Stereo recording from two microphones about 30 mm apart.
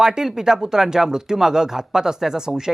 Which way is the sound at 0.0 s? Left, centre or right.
Centre.